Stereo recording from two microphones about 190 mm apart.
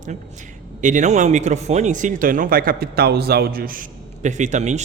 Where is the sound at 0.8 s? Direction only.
40° right (ahead or behind).